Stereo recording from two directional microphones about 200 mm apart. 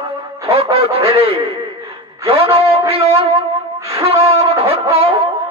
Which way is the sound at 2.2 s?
30° right (ahead or behind).